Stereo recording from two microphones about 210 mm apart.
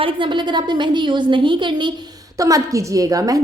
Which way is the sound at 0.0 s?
25° right (ahead or behind).